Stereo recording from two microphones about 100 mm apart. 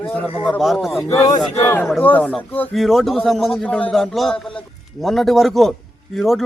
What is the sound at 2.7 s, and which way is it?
Speech, centre (ahead or behind).